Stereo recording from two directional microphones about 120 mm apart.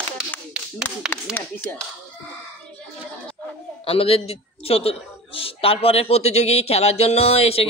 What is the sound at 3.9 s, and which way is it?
A man's voice, 55° left (ahead or behind).